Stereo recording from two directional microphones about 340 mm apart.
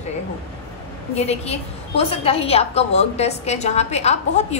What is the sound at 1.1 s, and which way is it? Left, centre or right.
A woman's voice, centre.